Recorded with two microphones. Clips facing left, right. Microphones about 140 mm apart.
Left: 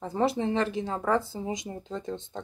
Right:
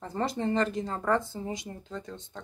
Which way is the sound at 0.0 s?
10° left (ahead or behind).